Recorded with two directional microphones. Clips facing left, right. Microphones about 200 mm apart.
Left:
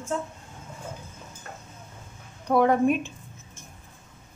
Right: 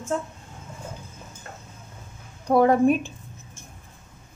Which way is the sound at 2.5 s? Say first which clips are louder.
Right 3 dB; 35° right (ahead or behind).